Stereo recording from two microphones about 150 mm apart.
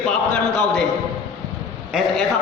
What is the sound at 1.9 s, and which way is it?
Speech, centre (ahead or behind).